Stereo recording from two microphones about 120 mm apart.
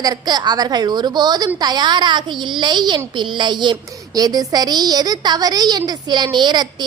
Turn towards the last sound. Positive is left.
turn(degrees=-35)  # may be behind; listen again after turning